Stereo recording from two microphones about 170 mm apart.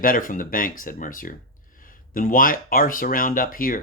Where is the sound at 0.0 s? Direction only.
55° left (ahead or behind).